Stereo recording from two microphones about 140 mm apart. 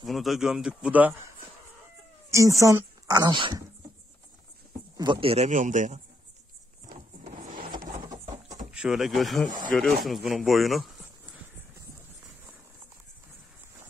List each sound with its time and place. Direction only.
0.0 s speech: centre (ahead or behind)
2.3 s speech: 20° right (ahead or behind)
4.9 s speech: 35° right (ahead or behind)
5.5 s a man's voice: 65° right (ahead or behind)
7.2 s printer: 65° right (ahead or behind)
8.8 s speech: centre (ahead or behind)